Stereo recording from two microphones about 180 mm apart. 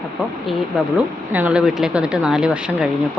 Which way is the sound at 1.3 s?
5° right (ahead or behind).